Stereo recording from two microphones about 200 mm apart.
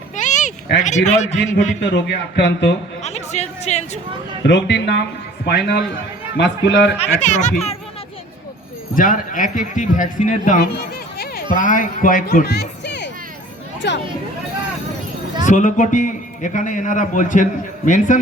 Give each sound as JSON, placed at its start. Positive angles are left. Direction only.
{"t": 0.2, "sound": "a sound", "side_deg": 40}
{"t": 0.9, "sound": "a man's voice", "side_deg": 35}
{"t": 1.8, "sound": "a man's voice", "side_deg": 60}
{"t": 3.0, "sound": "speech", "side_deg": 35}
{"t": 4.4, "sound": "a man's voice", "side_deg": 60}
{"t": 7.0, "sound": "a man's voice", "side_deg": 35}
{"t": 9.0, "sound": "a man's voice", "side_deg": 40}
{"t": 15.4, "sound": "a man's voice", "side_deg": 40}